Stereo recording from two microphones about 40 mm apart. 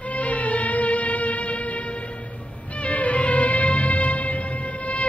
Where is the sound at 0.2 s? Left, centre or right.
Left.